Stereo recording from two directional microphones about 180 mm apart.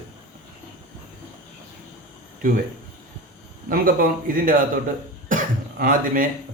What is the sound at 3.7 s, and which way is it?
A man's voice, 50° right (ahead or behind).